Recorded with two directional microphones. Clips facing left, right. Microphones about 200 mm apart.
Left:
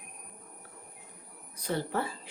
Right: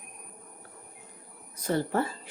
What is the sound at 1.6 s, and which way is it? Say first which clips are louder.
Speech: right 4 dB; 45° right (ahead or behind).